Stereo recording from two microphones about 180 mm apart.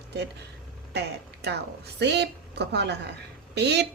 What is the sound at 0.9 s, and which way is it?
A woman's voice, 70° right (ahead or behind).